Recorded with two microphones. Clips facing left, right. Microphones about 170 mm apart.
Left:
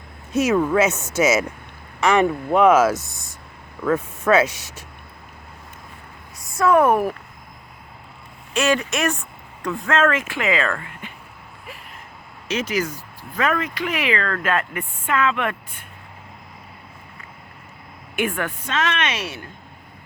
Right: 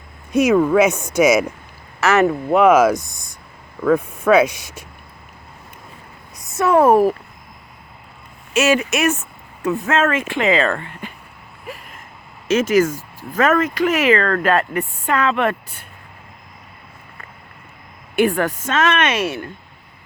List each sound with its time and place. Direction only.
0.3 s speech: 10° right (ahead or behind)
6.6 s speech: 25° right (ahead or behind)
8.5 s speech: 20° right (ahead or behind)
12.5 s speech: 45° right (ahead or behind)
18.2 s speech: 35° right (ahead or behind); by 19.5 s 55° right (ahead or behind)